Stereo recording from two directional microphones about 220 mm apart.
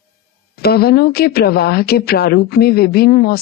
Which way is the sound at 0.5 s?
45° left (ahead or behind).